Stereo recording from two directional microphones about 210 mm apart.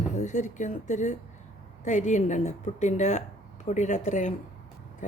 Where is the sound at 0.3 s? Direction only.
35° left (ahead or behind).